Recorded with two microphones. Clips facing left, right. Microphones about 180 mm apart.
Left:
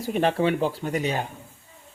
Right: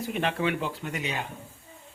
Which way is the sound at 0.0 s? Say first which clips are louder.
Left 5 dB; 40° left (ahead or behind).